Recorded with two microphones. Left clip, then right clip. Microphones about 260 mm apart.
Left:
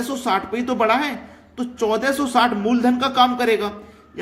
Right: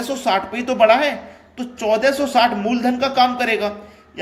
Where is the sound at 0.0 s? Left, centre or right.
Centre.